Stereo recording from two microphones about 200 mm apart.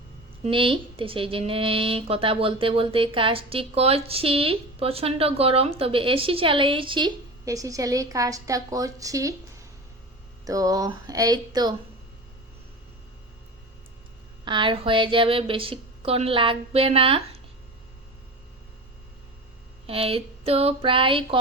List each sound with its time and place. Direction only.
0.4 s a woman's voice: 25° right (ahead or behind)
14.4 s a woman's voice: 25° right (ahead or behind)
19.9 s a woman's voice: 30° right (ahead or behind)